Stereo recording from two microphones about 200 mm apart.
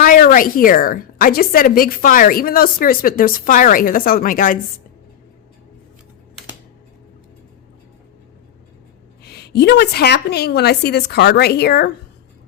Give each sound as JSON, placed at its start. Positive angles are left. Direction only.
{"t": 0.0, "sound": "a woman's voice", "side_deg": 45}
{"t": 9.2, "sound": "a woman's voice", "side_deg": 55}